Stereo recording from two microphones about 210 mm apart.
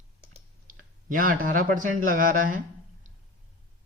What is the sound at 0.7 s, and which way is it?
Speech, 40° right (ahead or behind).